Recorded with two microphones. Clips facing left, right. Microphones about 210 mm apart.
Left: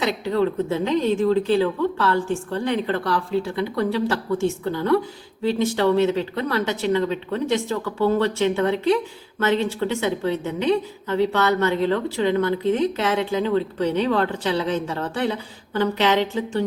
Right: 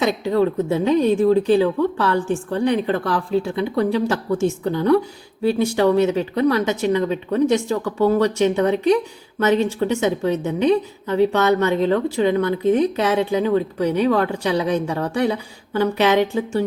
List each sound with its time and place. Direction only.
0.0 s a woman's voice: 15° right (ahead or behind)